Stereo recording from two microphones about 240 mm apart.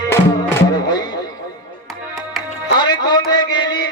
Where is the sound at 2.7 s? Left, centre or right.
Centre.